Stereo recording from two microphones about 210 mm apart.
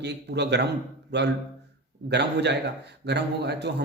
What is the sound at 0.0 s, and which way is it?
Speech, 55° right (ahead or behind).